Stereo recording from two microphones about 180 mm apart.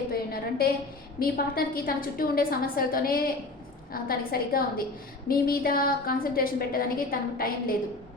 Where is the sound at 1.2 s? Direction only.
55° left (ahead or behind).